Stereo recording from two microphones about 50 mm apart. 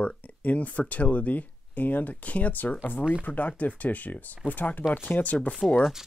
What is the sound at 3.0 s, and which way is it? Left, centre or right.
Speech, right.